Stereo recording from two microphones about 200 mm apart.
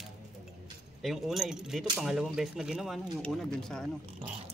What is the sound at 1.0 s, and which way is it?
Speech, centre (ahead or behind).